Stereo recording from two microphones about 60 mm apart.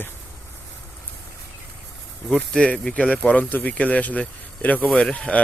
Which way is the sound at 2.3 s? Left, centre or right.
Centre.